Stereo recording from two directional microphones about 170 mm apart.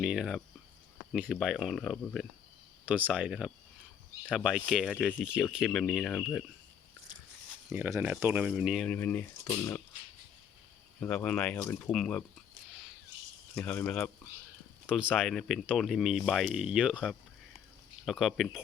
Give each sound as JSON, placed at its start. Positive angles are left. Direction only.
{"t": 0.0, "sound": "speech", "side_deg": -5}
{"t": 2.8, "sound": "speech", "side_deg": -10}
{"t": 7.7, "sound": "speech", "side_deg": -15}
{"t": 9.0, "sound": "speech", "side_deg": 10}
{"t": 11.0, "sound": "speech", "side_deg": 10}
{"t": 13.6, "sound": "speech", "side_deg": 10}
{"t": 14.8, "sound": "speech", "side_deg": -5}